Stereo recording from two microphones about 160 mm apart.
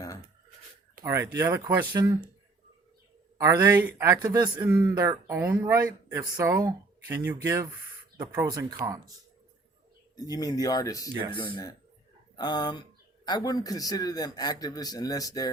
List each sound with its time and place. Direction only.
1.0 s speech: 15° right (ahead or behind)
3.3 s speech: 15° right (ahead or behind)
4.6 s speech: 10° right (ahead or behind)
4.9 s speech: 20° right (ahead or behind)
10.2 s a man's voice: 25° left (ahead or behind)